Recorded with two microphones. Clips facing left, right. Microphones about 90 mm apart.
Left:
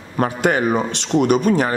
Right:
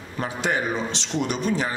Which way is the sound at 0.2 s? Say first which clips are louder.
Left 8 dB; 60° left (ahead or behind).